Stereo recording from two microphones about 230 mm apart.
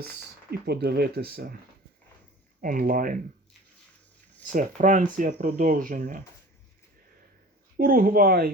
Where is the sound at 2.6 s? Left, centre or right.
Right.